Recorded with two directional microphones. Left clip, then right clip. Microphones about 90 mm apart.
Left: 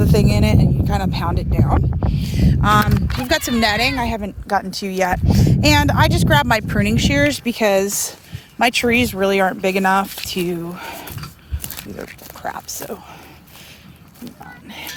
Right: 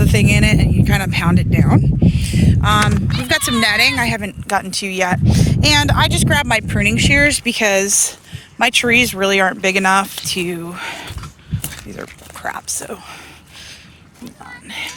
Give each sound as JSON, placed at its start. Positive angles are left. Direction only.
{"t": 0.0, "sound": "speech", "side_deg": 10}
{"t": 2.0, "sound": "speech", "side_deg": 30}
{"t": 2.3, "sound": "speech", "side_deg": 50}
{"t": 3.2, "sound": "speech", "side_deg": 35}
{"t": 3.5, "sound": "speech", "side_deg": 20}
{"t": 4.7, "sound": "speech", "side_deg": 35}
{"t": 5.5, "sound": "speech", "side_deg": 20}
{"t": 6.1, "sound": "speech", "side_deg": 40}
{"t": 7.5, "sound": "speech", "side_deg": 20}
{"t": 8.5, "sound": "speech", "side_deg": 35}
{"t": 10.2, "sound": "speech", "side_deg": 35}
{"t": 10.8, "sound": "a sound", "side_deg": 20}
{"t": 12.4, "sound": "speech", "side_deg": 25}
{"t": 14.7, "sound": "a sound", "side_deg": 20}